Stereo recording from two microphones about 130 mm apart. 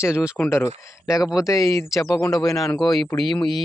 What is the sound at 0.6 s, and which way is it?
Speech, 5° right (ahead or behind).